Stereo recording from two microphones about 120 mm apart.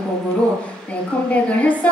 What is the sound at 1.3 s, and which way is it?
Speech, 10° left (ahead or behind).